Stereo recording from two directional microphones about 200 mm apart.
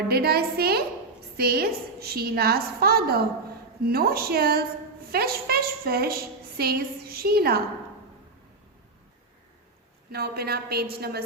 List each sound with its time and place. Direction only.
0.1 s a woman's voice: 50° right (ahead or behind)
10.1 s a woman's voice: 50° right (ahead or behind)